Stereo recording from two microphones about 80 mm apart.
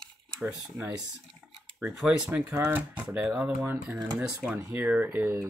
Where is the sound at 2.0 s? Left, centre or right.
Centre.